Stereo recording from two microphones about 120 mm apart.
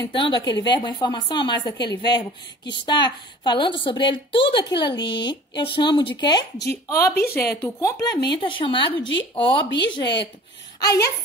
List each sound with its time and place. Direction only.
0.0 s a woman's voice: 40° left (ahead or behind)
6.7 s speech: 20° left (ahead or behind)
8.4 s a woman's voice: 45° left (ahead or behind)
10.8 s a woman's voice: 30° left (ahead or behind)